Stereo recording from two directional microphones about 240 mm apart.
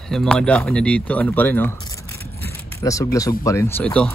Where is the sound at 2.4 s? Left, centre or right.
Centre.